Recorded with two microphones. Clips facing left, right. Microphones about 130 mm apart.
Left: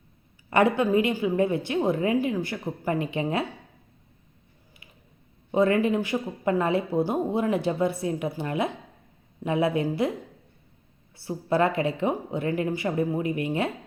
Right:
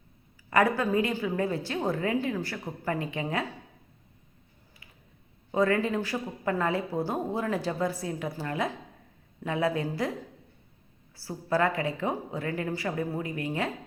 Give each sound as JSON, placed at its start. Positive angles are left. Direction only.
{"t": 0.5, "sound": "speech", "side_deg": 25}
{"t": 5.5, "sound": "speech", "side_deg": 20}
{"t": 11.2, "sound": "speech", "side_deg": 20}